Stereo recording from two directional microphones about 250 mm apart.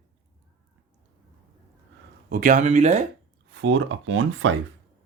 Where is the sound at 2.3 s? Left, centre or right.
Right.